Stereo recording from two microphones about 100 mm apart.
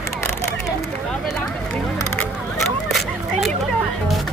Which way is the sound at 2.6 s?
Centre (ahead or behind).